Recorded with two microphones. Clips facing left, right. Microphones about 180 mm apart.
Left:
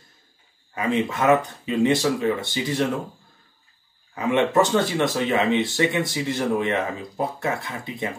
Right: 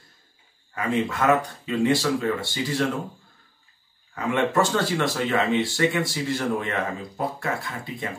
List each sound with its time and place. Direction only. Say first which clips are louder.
0.7 s speech: left 1 dB; 20° left (ahead or behind)
4.1 s speech: left 3 dB; 20° left (ahead or behind)